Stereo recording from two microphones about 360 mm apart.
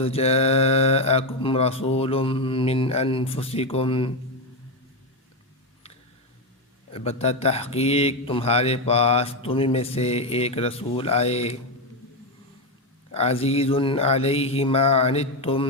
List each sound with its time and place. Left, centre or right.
0.0 s speech: centre
6.9 s speech: centre
13.1 s speech: centre